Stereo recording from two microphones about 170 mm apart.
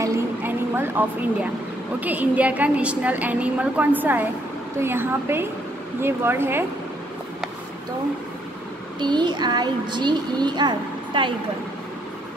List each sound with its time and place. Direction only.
0.0 s a sound: 15° right (ahead or behind)
2.0 s a woman's voice: 10° right (ahead or behind)
9.0 s a child's voice: 25° right (ahead or behind)